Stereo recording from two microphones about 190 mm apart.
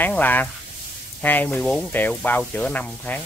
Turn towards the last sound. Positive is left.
turn(degrees=10)  # may be behind; listen again after turning